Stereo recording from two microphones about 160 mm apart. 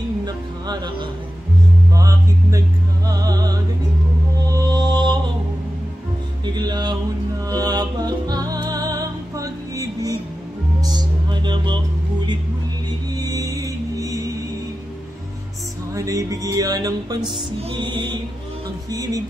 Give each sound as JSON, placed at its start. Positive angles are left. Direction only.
{"t": 0.2, "sound": "music", "side_deg": -25}
{"t": 6.4, "sound": "music", "side_deg": -25}
{"t": 13.1, "sound": "music", "side_deg": -25}
{"t": 15.9, "sound": "music", "side_deg": -20}
{"t": 17.6, "sound": "music", "side_deg": -35}
{"t": 18.9, "sound": "speech", "side_deg": -25}